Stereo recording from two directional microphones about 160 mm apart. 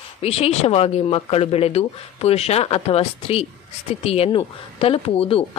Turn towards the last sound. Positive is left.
turn(degrees=35)  # may be behind; listen again after turning